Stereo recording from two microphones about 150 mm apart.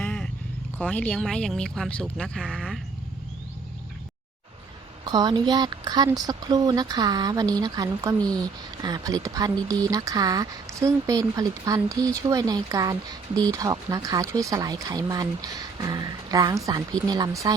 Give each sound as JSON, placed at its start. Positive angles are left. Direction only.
{"t": 0.0, "sound": "a sound", "side_deg": 10}
{"t": 0.8, "sound": "speech", "side_deg": 10}
{"t": 5.0, "sound": "speech", "side_deg": -25}